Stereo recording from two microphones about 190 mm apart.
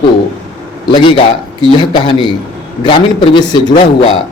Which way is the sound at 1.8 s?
25° left (ahead or behind).